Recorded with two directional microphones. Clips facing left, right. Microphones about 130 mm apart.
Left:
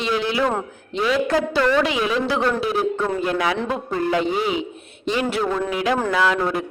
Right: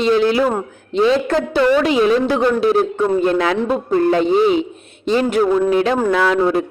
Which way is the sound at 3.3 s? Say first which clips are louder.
Right 6 dB; 30° right (ahead or behind).